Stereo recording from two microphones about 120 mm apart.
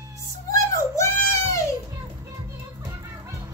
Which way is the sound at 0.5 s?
25° left (ahead or behind).